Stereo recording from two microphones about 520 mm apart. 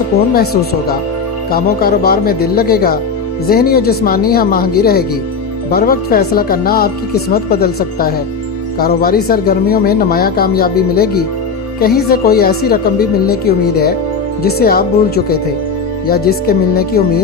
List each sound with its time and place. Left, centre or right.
1.5 s speech: centre